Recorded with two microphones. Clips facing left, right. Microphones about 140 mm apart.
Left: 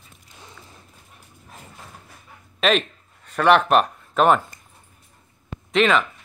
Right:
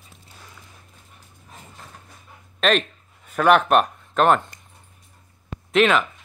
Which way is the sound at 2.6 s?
5° left (ahead or behind).